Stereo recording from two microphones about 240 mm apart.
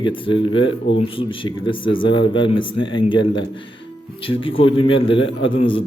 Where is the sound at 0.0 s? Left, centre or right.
Left.